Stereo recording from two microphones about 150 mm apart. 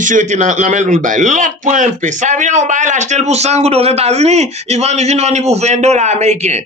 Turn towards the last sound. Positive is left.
turn(degrees=-50)  # may be behind; listen again after turning